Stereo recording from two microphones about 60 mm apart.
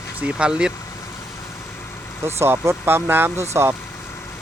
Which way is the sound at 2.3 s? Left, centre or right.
Right.